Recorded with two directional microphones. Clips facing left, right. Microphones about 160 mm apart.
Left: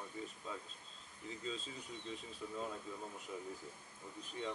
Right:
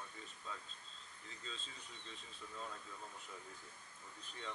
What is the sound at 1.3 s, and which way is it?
Speech, 5° left (ahead or behind).